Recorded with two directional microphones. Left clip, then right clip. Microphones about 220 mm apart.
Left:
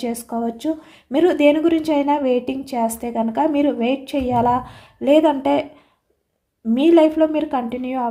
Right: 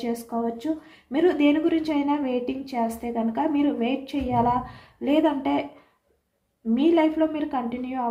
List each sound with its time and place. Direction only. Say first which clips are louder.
0.0 s speech: left 4 dB; 50° left (ahead or behind)
6.7 s speech: left 7 dB; 50° left (ahead or behind)